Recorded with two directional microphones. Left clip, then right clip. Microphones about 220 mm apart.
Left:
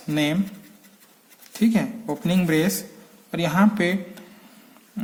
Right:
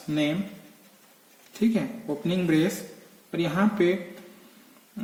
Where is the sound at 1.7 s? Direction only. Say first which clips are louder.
Left 4 dB; 45° left (ahead or behind).